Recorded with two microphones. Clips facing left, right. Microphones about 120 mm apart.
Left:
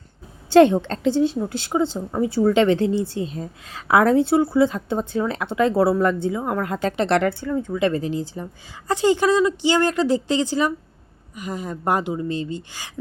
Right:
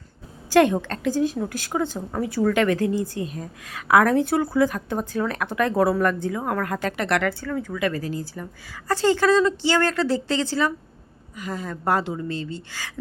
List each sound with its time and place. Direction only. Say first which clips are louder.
0.5 s speech: left 4 dB; 25° left (ahead or behind)